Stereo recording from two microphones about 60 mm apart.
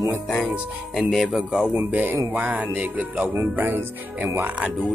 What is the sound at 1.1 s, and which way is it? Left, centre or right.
Speech, centre.